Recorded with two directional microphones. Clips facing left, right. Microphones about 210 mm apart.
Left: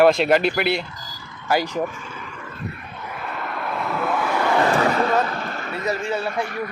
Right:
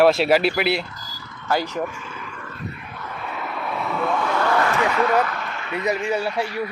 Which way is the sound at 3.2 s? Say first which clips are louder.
Even; centre (ahead or behind).